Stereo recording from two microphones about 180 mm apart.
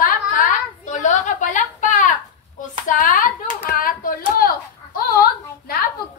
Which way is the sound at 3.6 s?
50° left (ahead or behind).